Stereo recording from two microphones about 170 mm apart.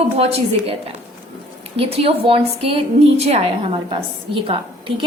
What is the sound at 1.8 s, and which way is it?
A woman's voice, 35° right (ahead or behind).